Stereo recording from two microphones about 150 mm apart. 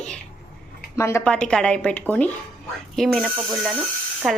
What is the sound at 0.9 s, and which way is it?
Speech, 20° left (ahead or behind).